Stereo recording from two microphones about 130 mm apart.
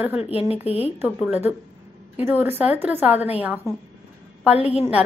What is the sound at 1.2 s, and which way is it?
A woman's voice, 10° right (ahead or behind).